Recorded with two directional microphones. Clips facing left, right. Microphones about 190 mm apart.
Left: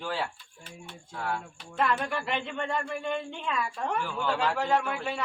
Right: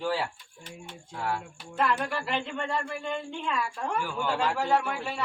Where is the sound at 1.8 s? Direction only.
5° right (ahead or behind).